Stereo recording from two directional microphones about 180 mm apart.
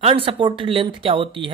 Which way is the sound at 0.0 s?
30° right (ahead or behind).